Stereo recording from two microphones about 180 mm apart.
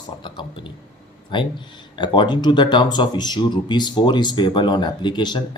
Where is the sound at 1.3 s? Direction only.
25° left (ahead or behind).